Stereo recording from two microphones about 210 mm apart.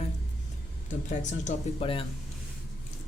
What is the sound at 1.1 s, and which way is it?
Speech, 35° left (ahead or behind).